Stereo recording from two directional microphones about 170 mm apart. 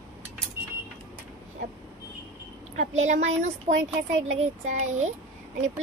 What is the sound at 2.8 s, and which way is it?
Speech, 45° right (ahead or behind).